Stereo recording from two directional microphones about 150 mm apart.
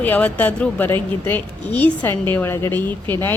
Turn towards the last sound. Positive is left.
turn(degrees=15)  # may be behind; listen again after turning